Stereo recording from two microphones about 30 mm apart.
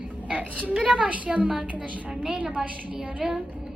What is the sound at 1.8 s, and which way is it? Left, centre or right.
A woman's voice, right.